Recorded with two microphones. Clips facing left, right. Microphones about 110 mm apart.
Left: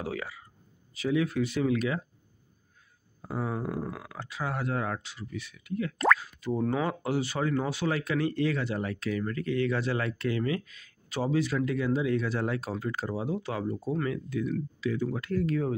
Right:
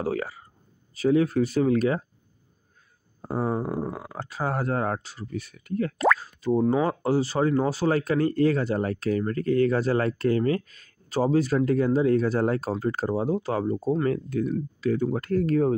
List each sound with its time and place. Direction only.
0.0 s speech: 40° right (ahead or behind)
3.2 s speech: 40° right (ahead or behind)